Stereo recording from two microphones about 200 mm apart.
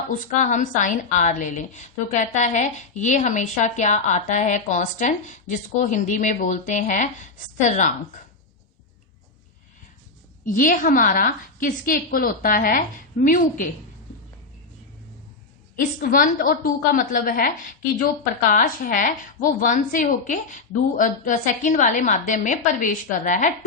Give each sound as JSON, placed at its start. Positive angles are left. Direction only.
{"t": 0.1, "sound": "a woman's voice", "side_deg": 40}
{"t": 10.4, "sound": "a woman's voice", "side_deg": 40}
{"t": 15.7, "sound": "a woman's voice", "side_deg": 45}